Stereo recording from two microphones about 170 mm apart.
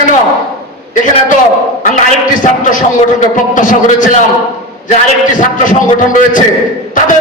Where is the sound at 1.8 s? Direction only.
50° left (ahead or behind).